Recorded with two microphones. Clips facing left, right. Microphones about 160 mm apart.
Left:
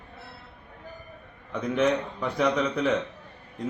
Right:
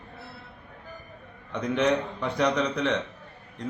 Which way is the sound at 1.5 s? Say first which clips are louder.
Even; 5° left (ahead or behind).